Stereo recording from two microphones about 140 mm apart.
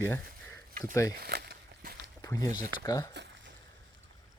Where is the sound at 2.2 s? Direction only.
25° left (ahead or behind).